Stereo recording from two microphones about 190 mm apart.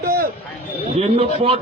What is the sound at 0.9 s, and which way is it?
Speech, 35° right (ahead or behind).